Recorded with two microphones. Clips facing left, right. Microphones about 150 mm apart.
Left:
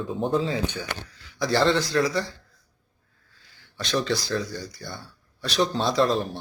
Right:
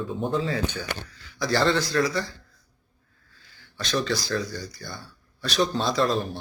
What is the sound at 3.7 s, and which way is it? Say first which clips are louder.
Speech: left 1 dB; 25° left (ahead or behind).